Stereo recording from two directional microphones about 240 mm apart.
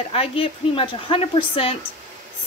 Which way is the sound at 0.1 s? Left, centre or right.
Left.